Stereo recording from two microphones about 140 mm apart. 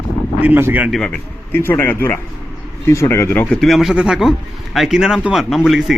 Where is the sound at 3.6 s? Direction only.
Centre (ahead or behind).